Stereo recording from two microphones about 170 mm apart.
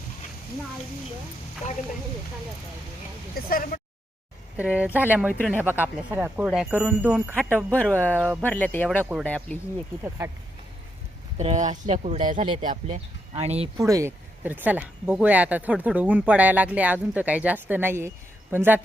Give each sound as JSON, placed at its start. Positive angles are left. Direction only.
{"t": 3.3, "sound": "speech", "side_deg": 60}
{"t": 4.5, "sound": "speech", "side_deg": -10}
{"t": 7.5, "sound": "speech", "side_deg": 10}
{"t": 10.0, "sound": "speech", "side_deg": -15}
{"t": 11.3, "sound": "speech", "side_deg": -45}
{"t": 13.3, "sound": "speech", "side_deg": -35}
{"t": 13.7, "sound": "speech", "side_deg": -20}